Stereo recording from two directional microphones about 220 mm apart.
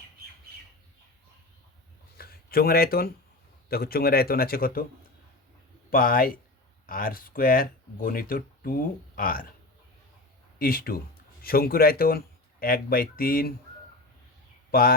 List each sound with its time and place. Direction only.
2.1 s a sound: 45° left (ahead or behind)
3.7 s speech: 45° left (ahead or behind)
5.9 s speech: 40° left (ahead or behind)
10.6 s speech: 40° left (ahead or behind)
14.7 s speech: 40° left (ahead or behind)